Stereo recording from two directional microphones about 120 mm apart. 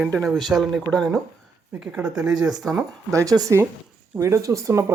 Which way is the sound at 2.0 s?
25° right (ahead or behind).